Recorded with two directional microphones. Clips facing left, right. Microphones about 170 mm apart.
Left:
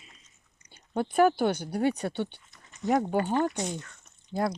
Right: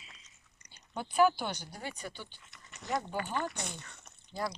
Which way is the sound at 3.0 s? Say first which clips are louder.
Left 10 dB; 45° left (ahead or behind).